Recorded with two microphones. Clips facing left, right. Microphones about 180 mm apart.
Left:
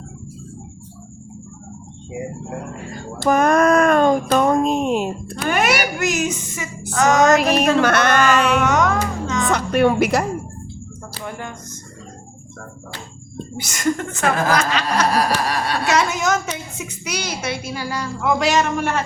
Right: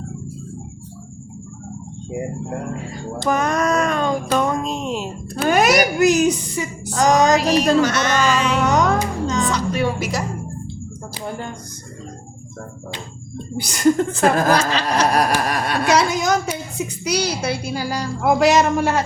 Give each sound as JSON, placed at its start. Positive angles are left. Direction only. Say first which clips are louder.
{"t": 3.2, "sound": "speech", "louder": "left 5 dB", "side_deg": 50}
{"t": 5.5, "sound": "a woman's voice", "louder": "right 4 dB", "side_deg": -40}
{"t": 7.3, "sound": "music", "louder": "even", "side_deg": 55}
{"t": 8.6, "sound": "music", "louder": "right 1 dB", "side_deg": -35}
{"t": 9.5, "sound": "speech", "louder": "left 4 dB", "side_deg": 55}
{"t": 13.6, "sound": "a woman's voice", "louder": "right 6 dB", "side_deg": -35}
{"t": 15.1, "sound": "a sound", "louder": "right 1 dB", "side_deg": -50}
{"t": 15.9, "sound": "a sound", "louder": "right 2 dB", "side_deg": -35}
{"t": 16.7, "sound": "a woman's voice", "louder": "right 6 dB", "side_deg": -35}